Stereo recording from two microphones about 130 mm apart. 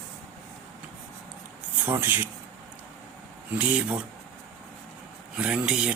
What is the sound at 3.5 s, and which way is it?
Speech, 10° right (ahead or behind).